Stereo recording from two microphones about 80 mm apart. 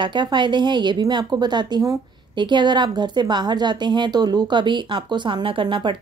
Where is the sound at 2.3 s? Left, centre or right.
Right.